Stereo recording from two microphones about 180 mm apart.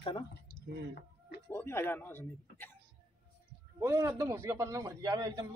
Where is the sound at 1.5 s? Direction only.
15° left (ahead or behind).